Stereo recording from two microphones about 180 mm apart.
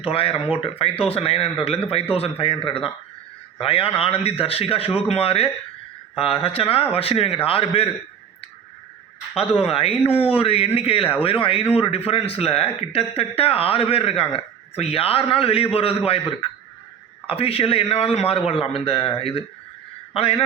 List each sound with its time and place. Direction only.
0.0 s a man's voice: 30° left (ahead or behind)
9.4 s a man's voice: 35° left (ahead or behind)